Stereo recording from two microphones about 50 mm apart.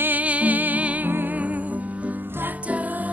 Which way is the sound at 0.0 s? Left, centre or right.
Right.